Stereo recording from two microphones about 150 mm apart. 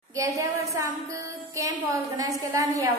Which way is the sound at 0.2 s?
20° right (ahead or behind).